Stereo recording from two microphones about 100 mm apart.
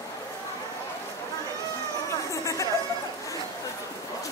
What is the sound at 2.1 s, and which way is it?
Chatter, 30° left (ahead or behind).